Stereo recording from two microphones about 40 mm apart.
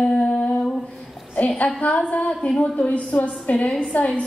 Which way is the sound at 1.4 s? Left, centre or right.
Left.